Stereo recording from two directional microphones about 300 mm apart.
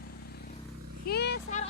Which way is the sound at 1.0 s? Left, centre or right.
Left.